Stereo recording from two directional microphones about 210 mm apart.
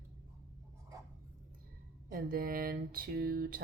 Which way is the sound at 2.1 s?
45° right (ahead or behind).